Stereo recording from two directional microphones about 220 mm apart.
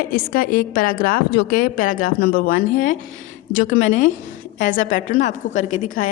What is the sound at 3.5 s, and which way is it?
Speech, 75° left (ahead or behind).